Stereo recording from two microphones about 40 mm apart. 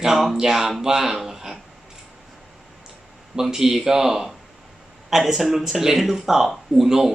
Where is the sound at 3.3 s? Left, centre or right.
Centre.